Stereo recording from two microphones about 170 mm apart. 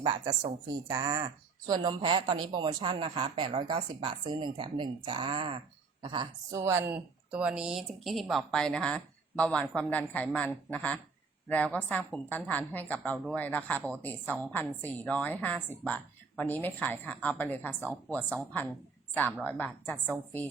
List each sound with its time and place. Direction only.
0.0 s a woman's voice: 35° right (ahead or behind)
0.9 s a woman's voice: 25° right (ahead or behind)
6.5 s a woman's voice: 15° right (ahead or behind); by 20.0 s 10° left (ahead or behind)